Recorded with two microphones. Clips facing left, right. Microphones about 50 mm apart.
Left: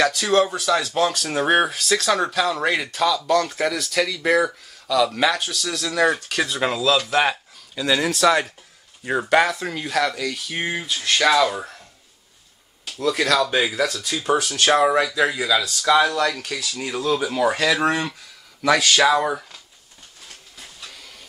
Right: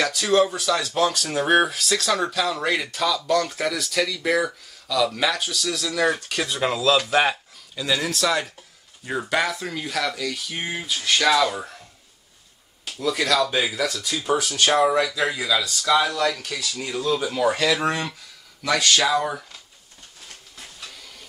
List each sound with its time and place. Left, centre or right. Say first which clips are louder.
0.3 s speech: right 2 dB; centre
6.9 s speech: right 1 dB; centre
7.9 s speech: left 5 dB; centre
12.8 s a sound: left 3 dB; centre
13.8 s speech: left 2 dB; centre
20.2 s train: even; centre